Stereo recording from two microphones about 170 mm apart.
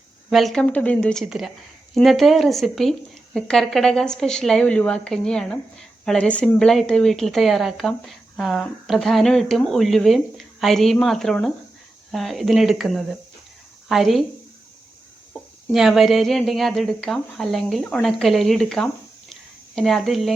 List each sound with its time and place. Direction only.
0.3 s a woman's voice: centre (ahead or behind)
15.3 s a woman's voice: centre (ahead or behind)
19.3 s a sound: centre (ahead or behind)